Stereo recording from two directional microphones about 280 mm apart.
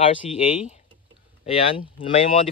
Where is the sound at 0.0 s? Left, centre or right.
Left.